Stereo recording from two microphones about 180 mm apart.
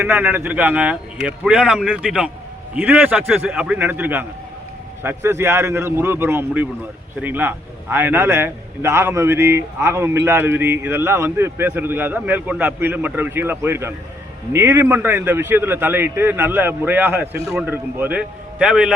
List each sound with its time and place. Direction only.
0.0 s a man's voice: 10° right (ahead or behind)